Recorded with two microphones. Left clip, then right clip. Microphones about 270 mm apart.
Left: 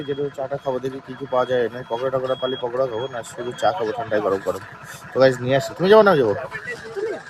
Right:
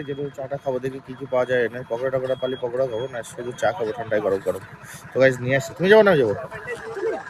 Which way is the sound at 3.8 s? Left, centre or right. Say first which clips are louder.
Left 2 dB; left.